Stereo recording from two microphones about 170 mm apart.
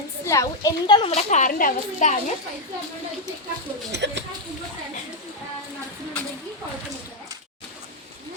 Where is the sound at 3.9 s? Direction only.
90° right.